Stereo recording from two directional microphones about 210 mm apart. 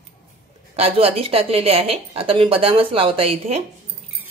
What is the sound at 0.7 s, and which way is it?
A woman's voice, 30° right (ahead or behind).